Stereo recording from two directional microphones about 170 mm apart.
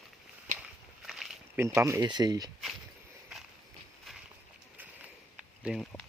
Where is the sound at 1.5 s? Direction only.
15° right (ahead or behind).